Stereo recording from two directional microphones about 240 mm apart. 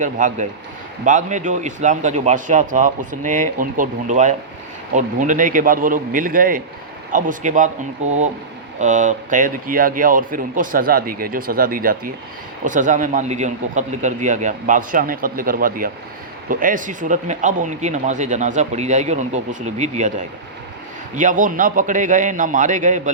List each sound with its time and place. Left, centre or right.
0.0 s speech: right